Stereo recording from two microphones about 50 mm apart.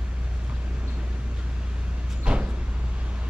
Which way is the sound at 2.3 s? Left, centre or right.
Centre.